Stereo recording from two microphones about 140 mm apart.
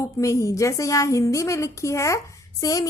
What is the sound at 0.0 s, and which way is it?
A woman's voice, 20° left (ahead or behind).